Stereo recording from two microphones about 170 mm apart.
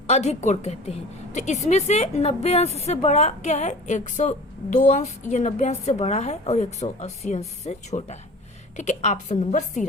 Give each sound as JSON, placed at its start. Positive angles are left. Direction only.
{"t": 0.1, "sound": "a woman's voice", "side_deg": 40}